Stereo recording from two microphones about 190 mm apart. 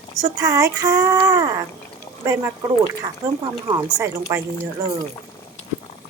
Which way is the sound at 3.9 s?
15° right (ahead or behind).